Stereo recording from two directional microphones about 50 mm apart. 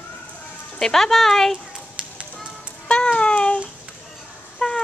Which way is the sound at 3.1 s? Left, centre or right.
Left.